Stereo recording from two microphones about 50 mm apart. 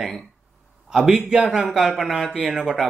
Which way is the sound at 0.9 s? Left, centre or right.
Centre.